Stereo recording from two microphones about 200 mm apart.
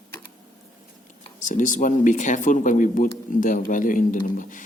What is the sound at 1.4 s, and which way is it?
Speech, 40° left (ahead or behind).